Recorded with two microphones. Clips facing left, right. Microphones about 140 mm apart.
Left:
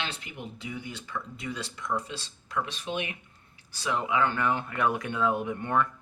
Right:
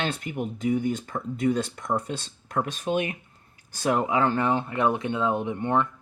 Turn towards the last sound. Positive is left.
turn(degrees=-25)  # may be behind; listen again after turning